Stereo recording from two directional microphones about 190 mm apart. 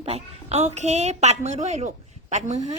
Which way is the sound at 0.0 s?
35° right (ahead or behind).